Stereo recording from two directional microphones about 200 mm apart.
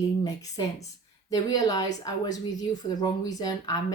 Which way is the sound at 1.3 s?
20° left (ahead or behind).